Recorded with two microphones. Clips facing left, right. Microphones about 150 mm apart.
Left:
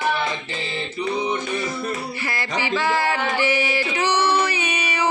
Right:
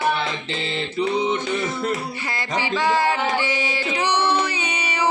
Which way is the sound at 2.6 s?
15° right (ahead or behind).